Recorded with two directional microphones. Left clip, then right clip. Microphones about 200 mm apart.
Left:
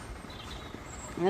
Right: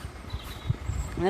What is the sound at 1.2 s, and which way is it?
Vehicle, 20° right (ahead or behind).